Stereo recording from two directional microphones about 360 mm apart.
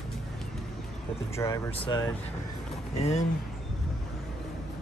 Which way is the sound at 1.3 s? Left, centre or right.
Centre.